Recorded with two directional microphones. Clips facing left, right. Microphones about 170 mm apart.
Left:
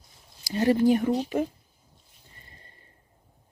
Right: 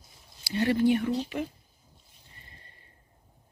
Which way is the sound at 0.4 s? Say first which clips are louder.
Left 3 dB; 40° left (ahead or behind).